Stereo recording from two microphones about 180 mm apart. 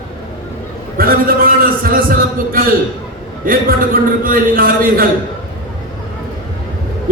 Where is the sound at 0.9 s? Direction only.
55° right (ahead or behind).